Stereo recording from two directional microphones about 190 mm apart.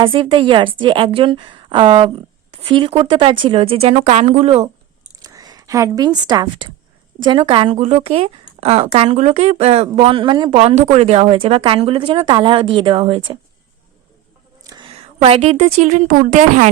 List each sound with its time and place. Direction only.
0.0 s a woman's voice: 25° right (ahead or behind)
5.2 s a woman's voice: 20° right (ahead or behind)
14.6 s a woman's voice: 20° right (ahead or behind); by 16.6 s 40° right (ahead or behind)